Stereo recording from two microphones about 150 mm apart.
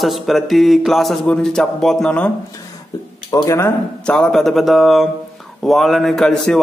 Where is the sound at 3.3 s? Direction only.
20° left (ahead or behind).